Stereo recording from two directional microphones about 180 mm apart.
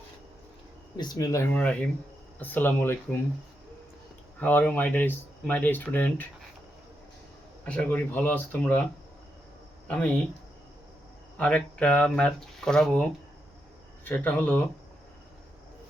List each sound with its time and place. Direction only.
0.9 s speech: 20° left (ahead or behind)
1.5 s speech: 5° left (ahead or behind)
4.4 s speech: 10° left (ahead or behind)
7.6 s speech: 5° left (ahead or behind)
11.3 s speech: 5° left (ahead or behind)